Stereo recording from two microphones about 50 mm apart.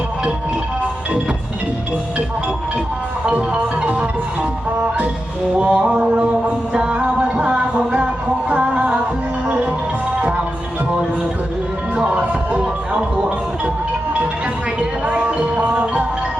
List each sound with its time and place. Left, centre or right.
3.2 s music: right
5.5 s music: right
10.2 s music: right
12.0 s music: right
14.8 s music: right